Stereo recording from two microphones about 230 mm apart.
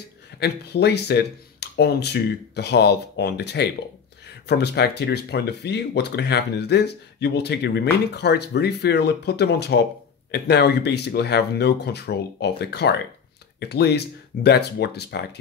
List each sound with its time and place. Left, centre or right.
0.4 s speech: left